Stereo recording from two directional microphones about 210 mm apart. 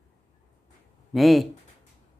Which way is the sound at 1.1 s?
Centre (ahead or behind).